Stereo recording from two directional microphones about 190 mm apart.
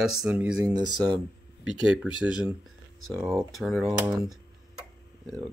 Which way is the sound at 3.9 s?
15° right (ahead or behind).